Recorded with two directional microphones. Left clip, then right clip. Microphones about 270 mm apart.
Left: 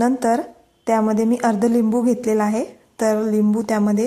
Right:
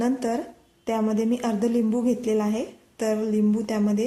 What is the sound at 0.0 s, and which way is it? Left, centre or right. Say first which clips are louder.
A woman's voice: left 7 dB; centre.